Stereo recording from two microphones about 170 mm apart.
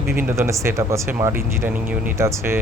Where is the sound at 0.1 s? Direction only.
15° right (ahead or behind).